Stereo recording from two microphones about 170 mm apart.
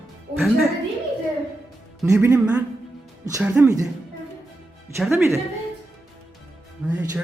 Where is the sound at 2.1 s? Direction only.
15° right (ahead or behind).